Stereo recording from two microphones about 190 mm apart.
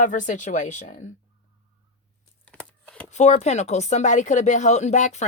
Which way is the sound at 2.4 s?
5° left (ahead or behind).